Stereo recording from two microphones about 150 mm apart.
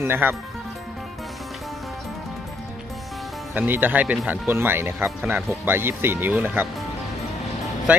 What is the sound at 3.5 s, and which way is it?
Speech, 15° right (ahead or behind).